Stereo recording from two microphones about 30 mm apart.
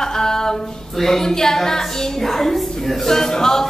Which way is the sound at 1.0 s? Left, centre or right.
Centre.